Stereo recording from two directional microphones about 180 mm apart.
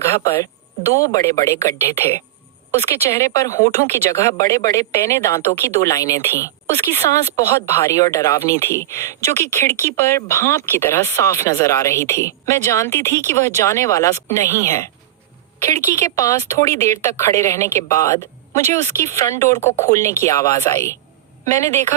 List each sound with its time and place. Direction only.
0.0 s speech: 15° left (ahead or behind)